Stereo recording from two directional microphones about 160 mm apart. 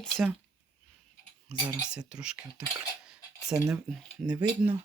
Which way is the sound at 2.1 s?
5° right (ahead or behind).